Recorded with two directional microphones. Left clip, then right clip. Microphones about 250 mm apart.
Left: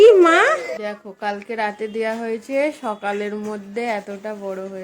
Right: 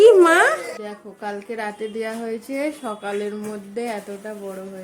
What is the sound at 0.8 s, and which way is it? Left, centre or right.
A woman's voice, left.